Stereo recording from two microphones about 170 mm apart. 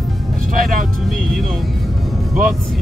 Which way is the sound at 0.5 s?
55° right (ahead or behind).